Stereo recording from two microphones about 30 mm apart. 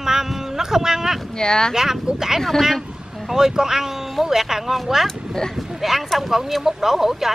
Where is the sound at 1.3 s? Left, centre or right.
Left.